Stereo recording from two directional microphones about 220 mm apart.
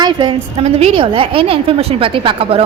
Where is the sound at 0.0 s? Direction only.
20° right (ahead or behind).